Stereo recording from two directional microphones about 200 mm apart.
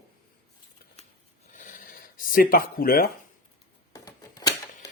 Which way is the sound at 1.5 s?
40° left (ahead or behind).